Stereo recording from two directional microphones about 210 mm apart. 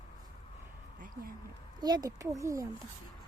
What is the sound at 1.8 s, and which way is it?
Speech, 20° right (ahead or behind).